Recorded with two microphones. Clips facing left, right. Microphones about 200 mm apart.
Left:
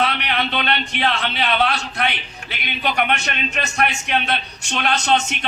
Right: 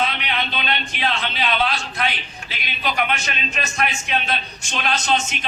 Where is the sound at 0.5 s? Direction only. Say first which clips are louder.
Left 4 dB; 65° left (ahead or behind).